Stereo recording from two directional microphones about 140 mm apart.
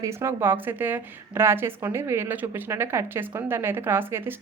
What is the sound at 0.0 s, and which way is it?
A woman's voice, 20° right (ahead or behind).